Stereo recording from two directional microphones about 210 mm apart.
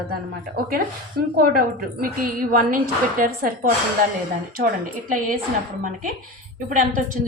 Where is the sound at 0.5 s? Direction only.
45° right (ahead or behind).